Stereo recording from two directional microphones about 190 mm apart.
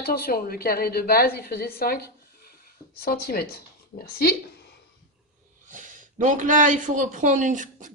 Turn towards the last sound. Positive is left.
turn(degrees=-40)  # may be behind; listen again after turning